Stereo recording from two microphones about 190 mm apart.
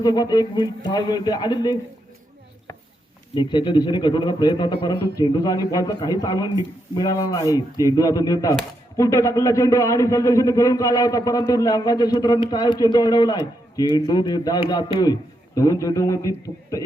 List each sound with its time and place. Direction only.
0.0 s a man's voice: 20° left (ahead or behind)
3.3 s a man's voice: 25° left (ahead or behind)